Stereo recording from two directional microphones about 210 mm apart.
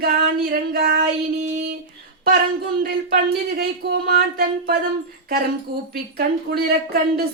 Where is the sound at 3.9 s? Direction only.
45° right (ahead or behind).